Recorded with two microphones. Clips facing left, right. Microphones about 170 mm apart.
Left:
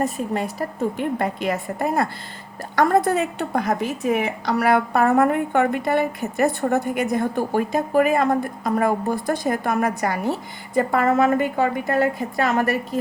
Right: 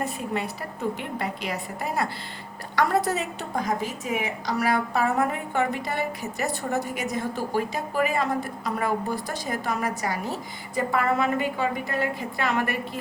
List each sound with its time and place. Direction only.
0.0 s a woman's voice: 45° left (ahead or behind)
10.8 s a woman's voice: 45° left (ahead or behind)